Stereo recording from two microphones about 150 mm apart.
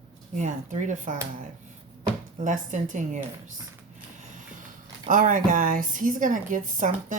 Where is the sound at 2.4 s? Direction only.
55° right (ahead or behind).